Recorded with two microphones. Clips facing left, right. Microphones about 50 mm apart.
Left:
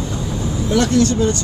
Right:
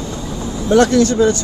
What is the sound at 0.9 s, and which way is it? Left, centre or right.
Speech, left.